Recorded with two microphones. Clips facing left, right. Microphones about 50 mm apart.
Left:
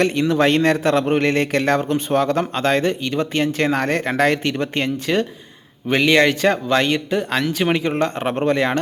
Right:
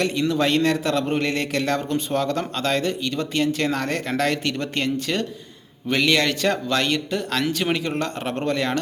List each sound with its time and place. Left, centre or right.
0.0 s a man's voice: left